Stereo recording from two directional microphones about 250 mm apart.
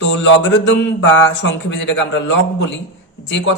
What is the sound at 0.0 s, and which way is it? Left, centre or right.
A man's voice, left.